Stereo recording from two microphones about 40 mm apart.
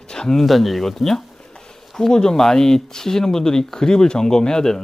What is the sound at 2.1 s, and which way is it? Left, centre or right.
Speech, centre.